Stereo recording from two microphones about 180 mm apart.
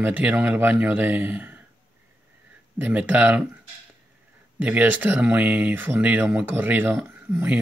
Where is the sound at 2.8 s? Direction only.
10° right (ahead or behind).